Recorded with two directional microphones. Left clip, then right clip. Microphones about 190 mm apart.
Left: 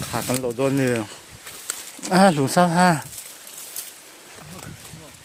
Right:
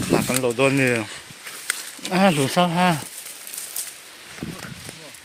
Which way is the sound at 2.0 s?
25° left (ahead or behind).